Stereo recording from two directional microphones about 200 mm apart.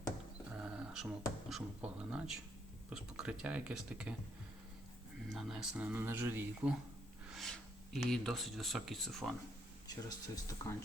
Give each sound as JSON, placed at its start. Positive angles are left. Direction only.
{"t": 0.5, "sound": "a sound", "side_deg": -5}
{"t": 1.5, "sound": "speech", "side_deg": -5}
{"t": 5.3, "sound": "speech", "side_deg": 0}
{"t": 7.3, "sound": "speech", "side_deg": 0}
{"t": 9.8, "sound": "speech", "side_deg": 20}